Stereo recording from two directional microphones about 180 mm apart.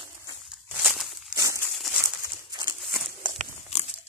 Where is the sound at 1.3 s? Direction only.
15° right (ahead or behind).